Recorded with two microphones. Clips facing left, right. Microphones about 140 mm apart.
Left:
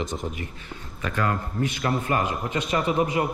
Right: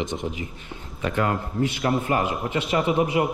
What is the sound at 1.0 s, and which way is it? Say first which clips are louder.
A man's voice: right 2 dB; 20° right (ahead or behind).